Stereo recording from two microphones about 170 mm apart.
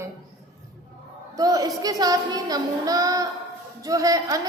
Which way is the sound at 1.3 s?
20° right (ahead or behind).